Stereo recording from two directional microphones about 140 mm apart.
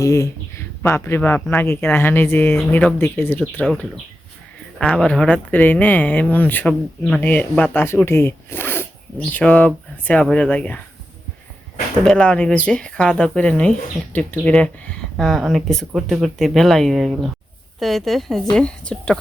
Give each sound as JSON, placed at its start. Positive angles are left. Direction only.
{"t": 0.0, "sound": "speech", "side_deg": 20}
{"t": 4.8, "sound": "speech", "side_deg": 5}
{"t": 12.0, "sound": "speech", "side_deg": 5}